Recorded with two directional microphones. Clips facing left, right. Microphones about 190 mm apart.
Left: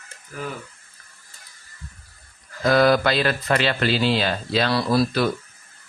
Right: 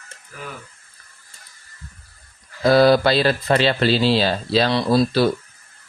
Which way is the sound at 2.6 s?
30° right (ahead or behind).